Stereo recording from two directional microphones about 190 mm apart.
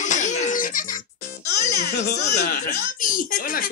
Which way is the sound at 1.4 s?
60° left (ahead or behind).